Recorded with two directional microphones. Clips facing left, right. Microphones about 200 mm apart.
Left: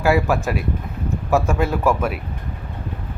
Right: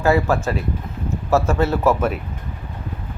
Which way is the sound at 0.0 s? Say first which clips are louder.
Right 1 dB; 15° left (ahead or behind).